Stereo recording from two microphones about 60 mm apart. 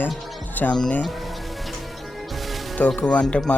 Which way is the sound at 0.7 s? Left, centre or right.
Centre.